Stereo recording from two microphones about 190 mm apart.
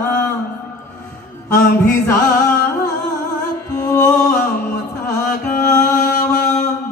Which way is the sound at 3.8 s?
20° left (ahead or behind).